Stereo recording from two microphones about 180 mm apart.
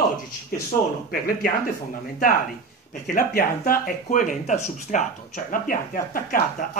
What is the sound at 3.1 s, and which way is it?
Speech, 50° left (ahead or behind).